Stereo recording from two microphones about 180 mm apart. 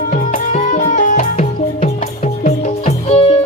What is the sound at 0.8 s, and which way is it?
Music, 45° left (ahead or behind).